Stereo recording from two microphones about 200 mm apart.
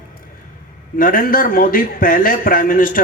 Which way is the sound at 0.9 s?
45° left (ahead or behind).